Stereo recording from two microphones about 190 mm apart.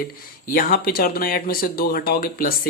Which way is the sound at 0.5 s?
50° left (ahead or behind).